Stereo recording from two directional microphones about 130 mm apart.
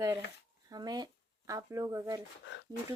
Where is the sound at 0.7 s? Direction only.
30° right (ahead or behind).